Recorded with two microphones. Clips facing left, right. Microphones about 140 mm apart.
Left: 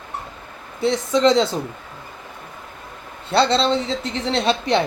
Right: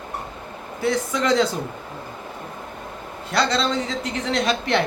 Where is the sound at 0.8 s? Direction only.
25° left (ahead or behind).